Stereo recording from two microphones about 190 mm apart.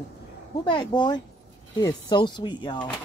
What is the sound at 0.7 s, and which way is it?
Speech, 25° left (ahead or behind).